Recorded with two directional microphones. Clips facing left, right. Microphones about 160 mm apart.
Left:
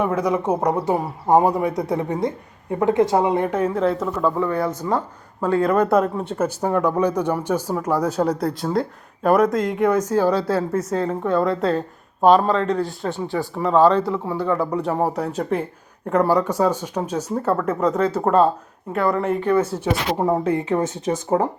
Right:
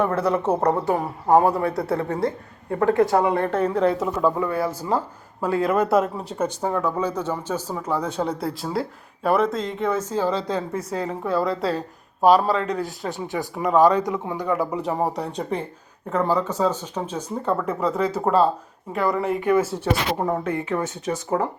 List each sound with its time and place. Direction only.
0.0 s speech: 10° left (ahead or behind)
4.0 s a man's voice: 10° right (ahead or behind)
9.8 s speech: 10° left (ahead or behind)
10.4 s a man's voice: 15° right (ahead or behind)
14.7 s speech: centre (ahead or behind)
17.7 s speech: 5° right (ahead or behind)
19.9 s speech: 10° left (ahead or behind)
20.4 s speech: 20° left (ahead or behind)
21.1 s speech: 35° left (ahead or behind)